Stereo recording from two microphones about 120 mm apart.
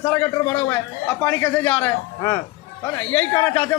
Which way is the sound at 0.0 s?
20° left (ahead or behind).